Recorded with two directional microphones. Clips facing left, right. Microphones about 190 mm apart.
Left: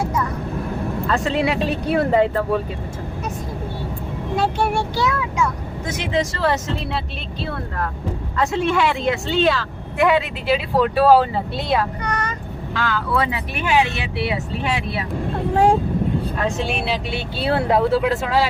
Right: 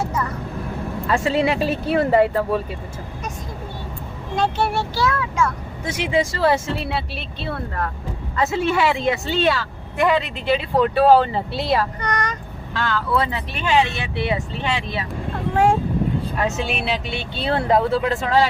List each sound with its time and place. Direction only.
1.0 s speech: 5° right (ahead or behind)
4.4 s speech: 10° left (ahead or behind)
5.9 s speech: 10° right (ahead or behind)
8.4 s speech: 5° right (ahead or behind)
16.6 s speech: centre (ahead or behind)